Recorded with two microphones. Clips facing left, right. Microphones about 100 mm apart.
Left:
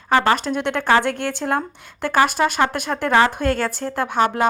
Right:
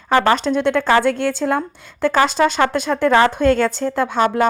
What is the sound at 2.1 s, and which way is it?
Speech, 10° left (ahead or behind).